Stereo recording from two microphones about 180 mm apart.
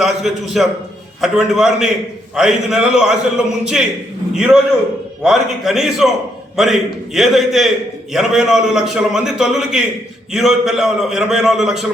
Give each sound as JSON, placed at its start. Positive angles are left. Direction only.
{"t": 0.0, "sound": "a man's voice", "side_deg": 0}